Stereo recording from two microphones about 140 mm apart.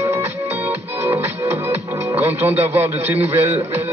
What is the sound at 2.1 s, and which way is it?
Speech, 15° right (ahead or behind).